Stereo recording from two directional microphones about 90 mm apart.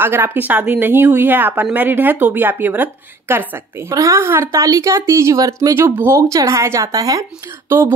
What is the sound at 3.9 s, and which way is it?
Speech, 35° right (ahead or behind).